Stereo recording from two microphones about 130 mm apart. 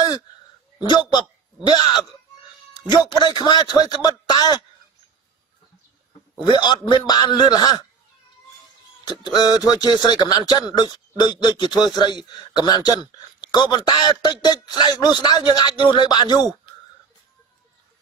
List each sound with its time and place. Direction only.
0.7 s speech: 35° left (ahead or behind)
6.4 s speech: 35° left (ahead or behind)
9.2 s speech: 35° left (ahead or behind)